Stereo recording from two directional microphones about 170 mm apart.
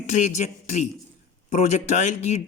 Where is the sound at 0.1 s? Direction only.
40° left (ahead or behind).